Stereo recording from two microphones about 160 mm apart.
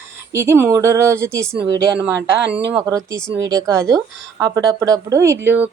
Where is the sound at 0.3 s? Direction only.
15° right (ahead or behind).